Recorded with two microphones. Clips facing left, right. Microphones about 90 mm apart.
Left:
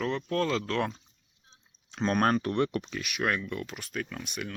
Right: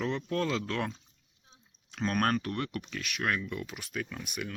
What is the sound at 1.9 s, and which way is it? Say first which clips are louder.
Speech: left 3 dB; 30° left (ahead or behind).